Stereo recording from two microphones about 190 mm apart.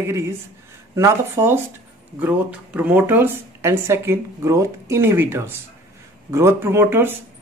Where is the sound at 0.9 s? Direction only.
15° right (ahead or behind).